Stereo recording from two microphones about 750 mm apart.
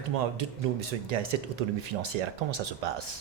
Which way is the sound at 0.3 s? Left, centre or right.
Right.